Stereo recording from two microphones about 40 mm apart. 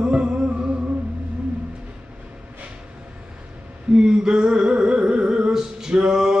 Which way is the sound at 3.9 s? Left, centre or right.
Centre.